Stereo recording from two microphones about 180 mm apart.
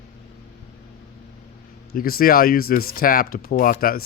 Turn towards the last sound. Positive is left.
turn(degrees=55)  # may be behind; listen again after turning